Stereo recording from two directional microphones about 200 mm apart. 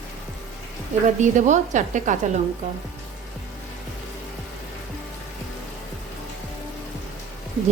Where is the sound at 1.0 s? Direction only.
35° right (ahead or behind).